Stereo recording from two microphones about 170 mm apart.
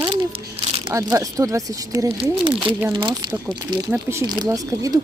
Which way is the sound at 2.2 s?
30° right (ahead or behind).